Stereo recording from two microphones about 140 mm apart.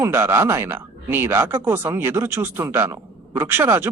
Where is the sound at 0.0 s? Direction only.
15° right (ahead or behind).